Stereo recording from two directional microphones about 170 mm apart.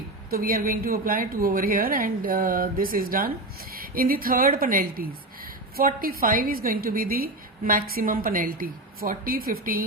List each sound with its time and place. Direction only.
0.3 s a woman's voice: 60° right (ahead or behind)